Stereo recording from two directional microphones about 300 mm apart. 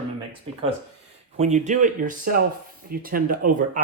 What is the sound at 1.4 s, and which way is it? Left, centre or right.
Speech, right.